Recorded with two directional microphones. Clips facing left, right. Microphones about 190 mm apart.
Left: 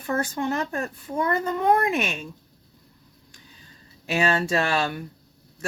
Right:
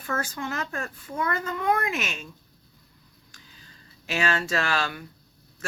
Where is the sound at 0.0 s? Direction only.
35° left (ahead or behind).